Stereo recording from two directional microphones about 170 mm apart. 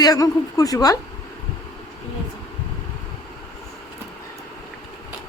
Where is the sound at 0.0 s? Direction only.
20° left (ahead or behind).